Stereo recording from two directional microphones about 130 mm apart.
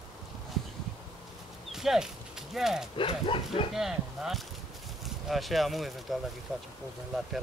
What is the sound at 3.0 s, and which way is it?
Speech, 40° left (ahead or behind).